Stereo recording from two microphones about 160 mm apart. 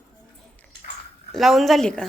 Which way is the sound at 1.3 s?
Centre (ahead or behind).